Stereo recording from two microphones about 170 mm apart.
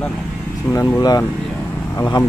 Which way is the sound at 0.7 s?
20° left (ahead or behind).